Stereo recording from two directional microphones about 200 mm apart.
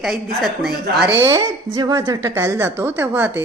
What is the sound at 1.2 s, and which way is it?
A woman's voice, 15° right (ahead or behind).